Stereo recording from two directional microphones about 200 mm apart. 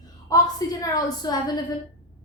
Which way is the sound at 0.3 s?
20° left (ahead or behind).